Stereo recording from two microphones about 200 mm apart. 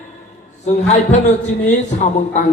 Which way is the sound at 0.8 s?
35° left (ahead or behind).